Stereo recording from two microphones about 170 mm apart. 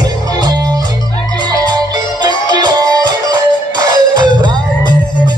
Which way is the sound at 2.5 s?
25° right (ahead or behind).